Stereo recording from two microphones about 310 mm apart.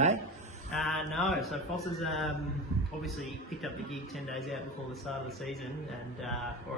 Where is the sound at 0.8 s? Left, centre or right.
Centre.